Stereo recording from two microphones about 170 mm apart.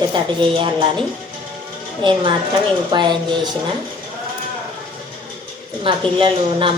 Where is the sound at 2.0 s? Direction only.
30° right (ahead or behind).